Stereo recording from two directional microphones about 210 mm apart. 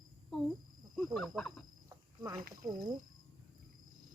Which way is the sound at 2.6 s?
20° right (ahead or behind).